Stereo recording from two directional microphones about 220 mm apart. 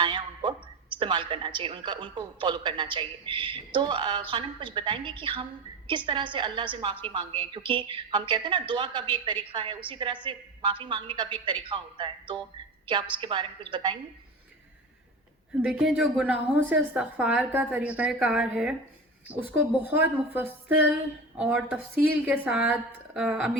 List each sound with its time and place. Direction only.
0.0 s speech: 20° right (ahead or behind)
15.6 s a woman's voice: 5° right (ahead or behind)